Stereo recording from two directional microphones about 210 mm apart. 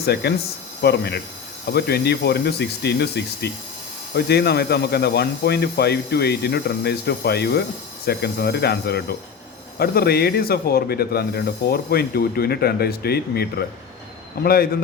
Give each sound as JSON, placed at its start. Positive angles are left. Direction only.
{"t": 0.0, "sound": "speech", "side_deg": 50}